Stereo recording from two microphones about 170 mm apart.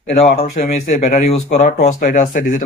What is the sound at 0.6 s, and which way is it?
Speech, 45° left (ahead or behind).